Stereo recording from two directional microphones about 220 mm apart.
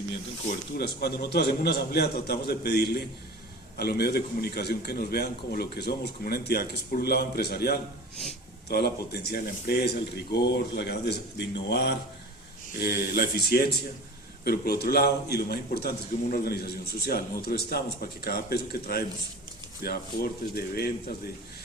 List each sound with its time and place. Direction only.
0.8 s a man's voice: 45° left (ahead or behind)